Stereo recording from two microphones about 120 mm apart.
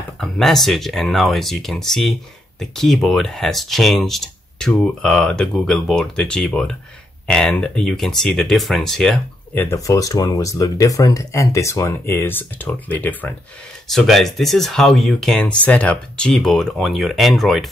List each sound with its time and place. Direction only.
0.2 s speech: 5° left (ahead or behind)
9.6 s speech: 25° left (ahead or behind)
13.8 s speech: centre (ahead or behind)